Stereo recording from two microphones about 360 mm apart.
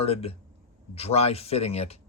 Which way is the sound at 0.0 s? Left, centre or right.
Centre.